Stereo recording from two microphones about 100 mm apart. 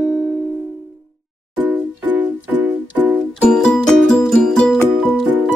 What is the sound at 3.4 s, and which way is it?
Music, 10° left (ahead or behind).